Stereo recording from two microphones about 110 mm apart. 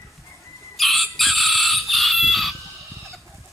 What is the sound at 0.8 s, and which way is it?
Chicken, centre (ahead or behind).